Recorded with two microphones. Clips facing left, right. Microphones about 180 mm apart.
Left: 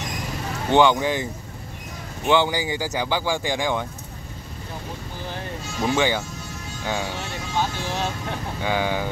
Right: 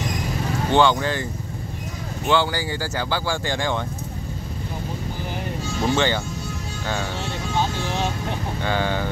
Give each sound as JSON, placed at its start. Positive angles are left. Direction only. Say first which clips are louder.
{"t": 0.7, "sound": "speech", "louder": "left 1 dB", "side_deg": 15}
{"t": 2.2, "sound": "speech", "louder": "left 1 dB", "side_deg": 15}
{"t": 5.9, "sound": "speech", "louder": "even", "side_deg": 10}
{"t": 8.6, "sound": "speech", "louder": "even", "side_deg": 10}